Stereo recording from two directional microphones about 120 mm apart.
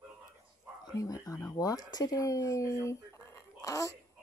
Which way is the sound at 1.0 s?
30° left (ahead or behind).